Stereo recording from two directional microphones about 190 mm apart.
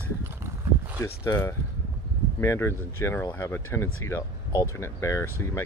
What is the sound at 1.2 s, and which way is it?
Speech, 15° left (ahead or behind).